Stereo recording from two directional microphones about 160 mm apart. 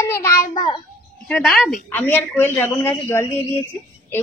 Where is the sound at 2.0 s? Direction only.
15° left (ahead or behind).